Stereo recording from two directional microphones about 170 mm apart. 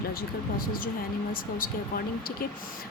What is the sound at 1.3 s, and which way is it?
Speech, 55° left (ahead or behind).